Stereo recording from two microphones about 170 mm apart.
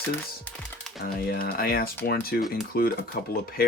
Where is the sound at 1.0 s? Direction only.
65° left (ahead or behind).